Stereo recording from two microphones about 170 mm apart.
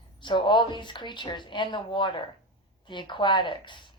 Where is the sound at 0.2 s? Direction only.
30° left (ahead or behind).